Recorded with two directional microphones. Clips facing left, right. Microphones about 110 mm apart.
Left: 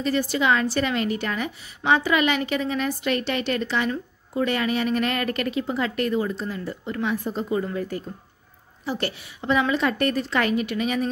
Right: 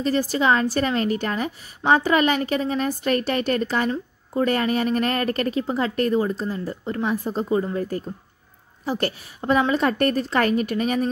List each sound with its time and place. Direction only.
0.0 s a woman's voice: 40° right (ahead or behind)